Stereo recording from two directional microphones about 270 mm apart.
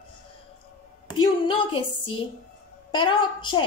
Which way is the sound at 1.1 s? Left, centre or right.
Centre.